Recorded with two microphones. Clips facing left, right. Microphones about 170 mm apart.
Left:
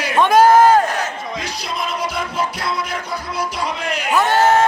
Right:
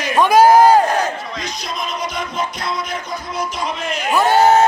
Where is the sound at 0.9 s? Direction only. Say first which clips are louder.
Right 5 dB; 35° right (ahead or behind).